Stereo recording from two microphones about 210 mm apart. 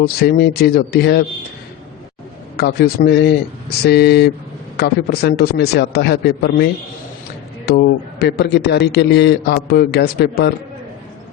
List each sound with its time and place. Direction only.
0.0 s a man's voice: 50° left (ahead or behind)
2.6 s a man's voice: 50° left (ahead or behind)